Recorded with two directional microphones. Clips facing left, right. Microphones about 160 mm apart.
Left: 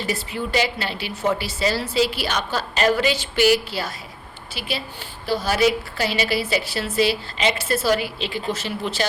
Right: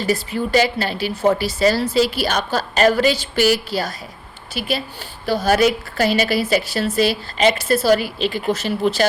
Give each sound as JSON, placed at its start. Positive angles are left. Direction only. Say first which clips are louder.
{"t": 0.0, "sound": "a woman's voice", "louder": "right 6 dB", "side_deg": -40}
{"t": 5.2, "sound": "a woman's voice", "louder": "right 4 dB", "side_deg": -45}